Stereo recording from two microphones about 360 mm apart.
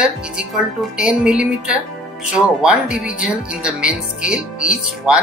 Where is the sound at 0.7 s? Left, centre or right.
Centre.